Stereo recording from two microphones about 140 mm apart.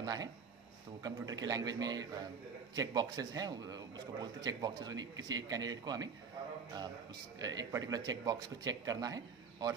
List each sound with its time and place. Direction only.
0.0 s a man's voice: 25° right (ahead or behind)
7.3 s a man's voice: 25° right (ahead or behind)